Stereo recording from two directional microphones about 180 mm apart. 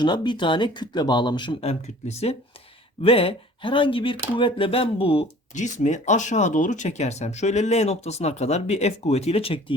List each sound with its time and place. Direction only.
0.0 s speech: 25° left (ahead or behind)
3.0 s speech: 30° left (ahead or behind)